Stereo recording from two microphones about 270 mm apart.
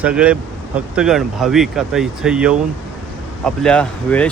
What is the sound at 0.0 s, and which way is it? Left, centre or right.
Speech, centre.